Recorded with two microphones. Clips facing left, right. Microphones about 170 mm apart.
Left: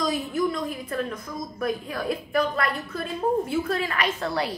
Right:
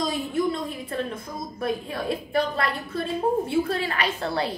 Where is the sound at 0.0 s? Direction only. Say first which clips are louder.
Even; 30° right (ahead or behind).